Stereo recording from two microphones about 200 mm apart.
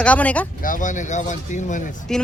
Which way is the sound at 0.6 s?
40° left (ahead or behind).